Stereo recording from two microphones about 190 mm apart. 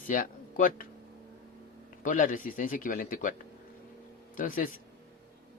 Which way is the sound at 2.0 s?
45° left (ahead or behind).